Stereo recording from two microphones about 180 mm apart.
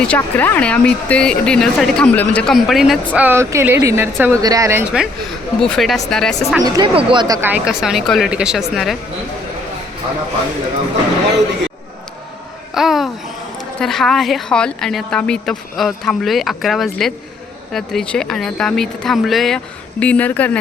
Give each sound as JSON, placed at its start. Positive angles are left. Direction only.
{"t": 0.0, "sound": "speech", "side_deg": 10}
{"t": 6.6, "sound": "speech", "side_deg": -20}
{"t": 7.4, "sound": "speech", "side_deg": -5}
{"t": 12.7, "sound": "a sound", "side_deg": 0}
{"t": 13.7, "sound": "speech", "side_deg": 0}